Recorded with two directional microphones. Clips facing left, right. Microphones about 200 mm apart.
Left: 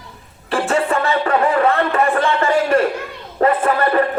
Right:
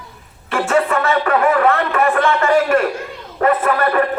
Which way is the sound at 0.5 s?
30° left (ahead or behind).